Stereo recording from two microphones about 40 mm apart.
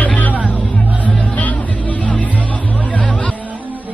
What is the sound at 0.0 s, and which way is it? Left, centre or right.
Music, left.